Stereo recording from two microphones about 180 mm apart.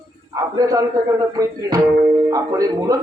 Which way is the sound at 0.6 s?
20° right (ahead or behind).